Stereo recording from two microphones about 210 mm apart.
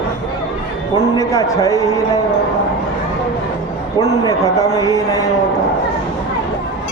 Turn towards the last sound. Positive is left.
turn(degrees=15)  # may be behind; listen again after turning